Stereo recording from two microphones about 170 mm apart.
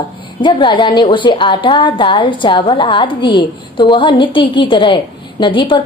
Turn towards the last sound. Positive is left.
turn(degrees=30)  # may be behind; listen again after turning